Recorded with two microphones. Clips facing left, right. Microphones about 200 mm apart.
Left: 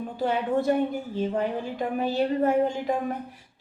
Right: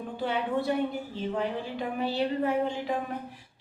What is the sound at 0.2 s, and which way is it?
A woman's voice, 45° left (ahead or behind).